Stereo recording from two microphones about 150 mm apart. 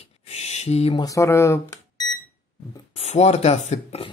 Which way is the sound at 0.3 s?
45° left (ahead or behind).